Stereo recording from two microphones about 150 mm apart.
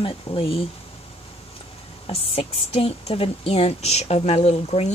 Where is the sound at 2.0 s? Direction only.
40° left (ahead or behind).